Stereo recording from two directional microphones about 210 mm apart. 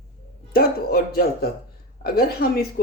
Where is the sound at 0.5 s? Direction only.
45° left (ahead or behind).